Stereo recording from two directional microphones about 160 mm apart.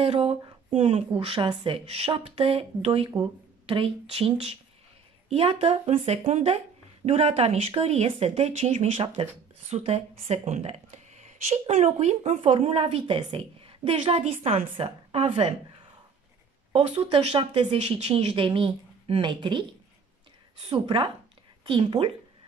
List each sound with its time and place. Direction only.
0.0 s speech: 40° right (ahead or behind)
16.7 s speech: 40° right (ahead or behind)
20.6 s speech: 40° right (ahead or behind)